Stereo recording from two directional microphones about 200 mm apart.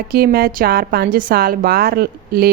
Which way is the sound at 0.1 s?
50° right (ahead or behind).